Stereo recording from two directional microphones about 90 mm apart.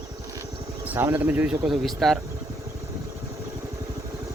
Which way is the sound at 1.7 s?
Centre (ahead or behind).